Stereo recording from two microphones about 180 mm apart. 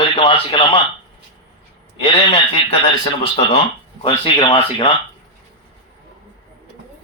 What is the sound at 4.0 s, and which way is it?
Speech, 25° left (ahead or behind).